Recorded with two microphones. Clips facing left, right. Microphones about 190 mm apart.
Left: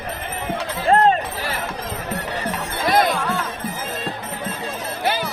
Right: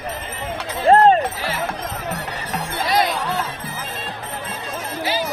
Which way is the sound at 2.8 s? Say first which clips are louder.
Left 3 dB; 50° left (ahead or behind).